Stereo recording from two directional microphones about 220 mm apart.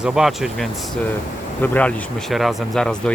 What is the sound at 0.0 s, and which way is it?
Speech, centre (ahead or behind).